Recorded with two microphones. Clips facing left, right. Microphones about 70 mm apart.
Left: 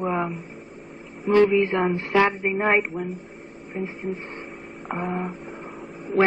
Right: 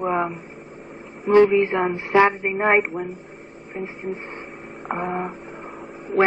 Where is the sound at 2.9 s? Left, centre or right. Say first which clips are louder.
Right 1 dB; right.